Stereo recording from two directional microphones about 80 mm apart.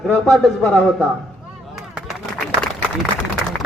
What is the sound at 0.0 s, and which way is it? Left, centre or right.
Speech, centre.